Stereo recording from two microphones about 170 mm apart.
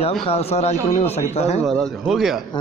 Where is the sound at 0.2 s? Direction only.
35° left (ahead or behind).